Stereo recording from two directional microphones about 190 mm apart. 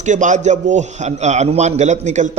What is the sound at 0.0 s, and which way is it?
A man's voice, 40° right (ahead or behind).